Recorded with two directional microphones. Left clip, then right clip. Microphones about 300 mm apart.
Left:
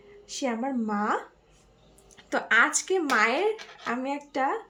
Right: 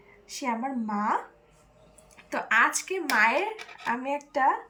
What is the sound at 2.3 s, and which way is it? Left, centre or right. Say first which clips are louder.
Speech: left 1 dB; centre.